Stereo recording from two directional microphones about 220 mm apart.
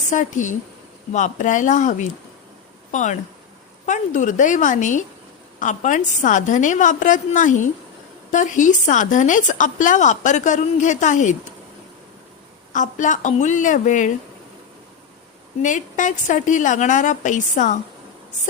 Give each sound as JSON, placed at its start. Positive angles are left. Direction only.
{"t": 0.1, "sound": "a woman's voice", "side_deg": 35}
{"t": 12.7, "sound": "a woman's voice", "side_deg": 35}
{"t": 15.6, "sound": "a woman's voice", "side_deg": 35}